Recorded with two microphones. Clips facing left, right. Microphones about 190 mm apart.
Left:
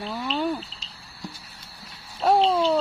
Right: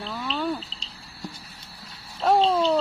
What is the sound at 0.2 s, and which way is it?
Cricket, 15° left (ahead or behind).